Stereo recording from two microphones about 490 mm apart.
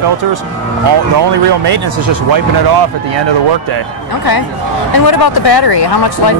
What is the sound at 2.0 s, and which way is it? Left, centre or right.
Speech, right.